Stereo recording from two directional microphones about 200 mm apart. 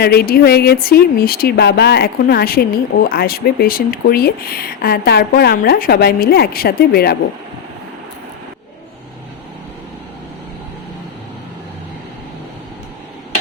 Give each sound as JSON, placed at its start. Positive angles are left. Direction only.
{"t": 0.0, "sound": "speech", "side_deg": 50}